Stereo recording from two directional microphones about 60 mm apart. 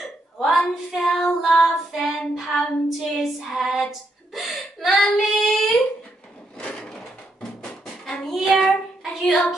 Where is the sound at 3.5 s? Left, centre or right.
Centre.